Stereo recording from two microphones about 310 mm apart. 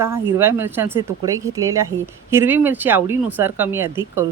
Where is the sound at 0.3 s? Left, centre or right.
Centre.